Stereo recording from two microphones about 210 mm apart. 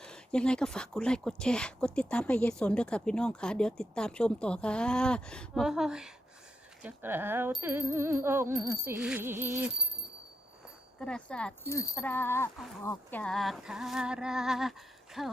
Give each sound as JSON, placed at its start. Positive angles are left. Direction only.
{"t": 0.0, "sound": "speech", "side_deg": 5}
{"t": 6.8, "sound": "a sound", "side_deg": -10}
{"t": 11.0, "sound": "speech", "side_deg": 5}